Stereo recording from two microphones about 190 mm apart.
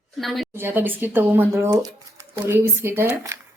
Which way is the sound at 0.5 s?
10° right (ahead or behind).